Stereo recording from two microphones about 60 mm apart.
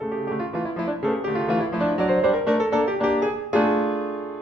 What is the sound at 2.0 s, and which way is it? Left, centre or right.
Music, centre.